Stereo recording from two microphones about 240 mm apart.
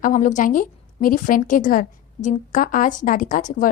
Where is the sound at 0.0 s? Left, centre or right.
Left.